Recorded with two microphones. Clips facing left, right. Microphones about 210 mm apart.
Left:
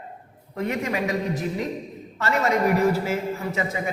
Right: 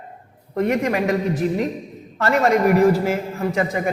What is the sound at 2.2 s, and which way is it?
A man's voice, 55° right (ahead or behind).